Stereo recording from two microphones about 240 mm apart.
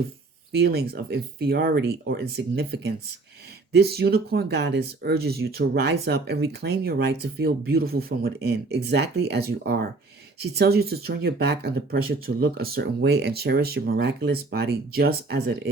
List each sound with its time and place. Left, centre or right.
0.5 s speech: right